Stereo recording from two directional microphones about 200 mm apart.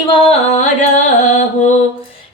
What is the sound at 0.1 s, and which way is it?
Music, 30° left (ahead or behind).